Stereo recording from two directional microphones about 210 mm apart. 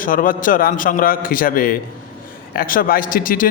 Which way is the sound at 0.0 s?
40° left (ahead or behind).